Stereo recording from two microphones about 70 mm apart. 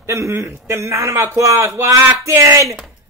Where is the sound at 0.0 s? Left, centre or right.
Right.